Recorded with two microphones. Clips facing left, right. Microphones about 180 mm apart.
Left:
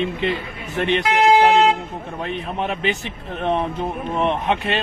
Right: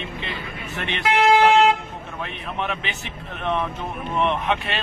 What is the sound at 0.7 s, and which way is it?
Speech, 45° left (ahead or behind).